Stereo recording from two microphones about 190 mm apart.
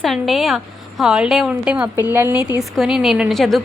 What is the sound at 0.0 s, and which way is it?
A woman's voice, centre (ahead or behind).